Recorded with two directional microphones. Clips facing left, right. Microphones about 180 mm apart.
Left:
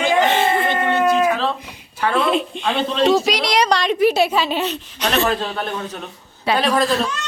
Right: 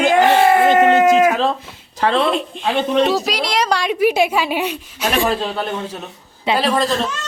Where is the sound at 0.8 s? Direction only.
90° right.